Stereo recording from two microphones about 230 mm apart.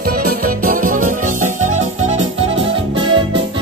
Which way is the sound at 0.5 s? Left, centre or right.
Right.